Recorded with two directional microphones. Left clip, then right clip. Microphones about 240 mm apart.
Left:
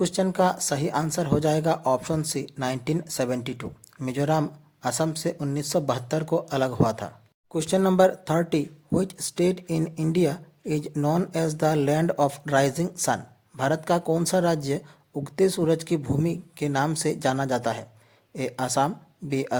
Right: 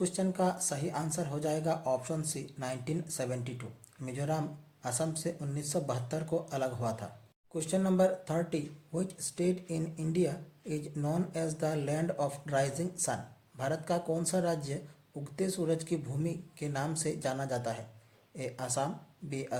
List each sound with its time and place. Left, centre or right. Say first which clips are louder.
0.0 s speech: left 9 dB; left